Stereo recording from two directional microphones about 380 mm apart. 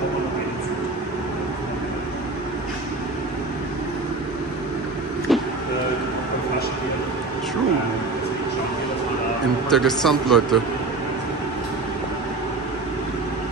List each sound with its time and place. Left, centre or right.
5.3 s vehicle: centre
9.7 s a man's voice: centre